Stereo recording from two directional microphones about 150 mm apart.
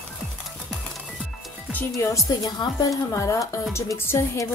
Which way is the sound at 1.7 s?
15° left (ahead or behind).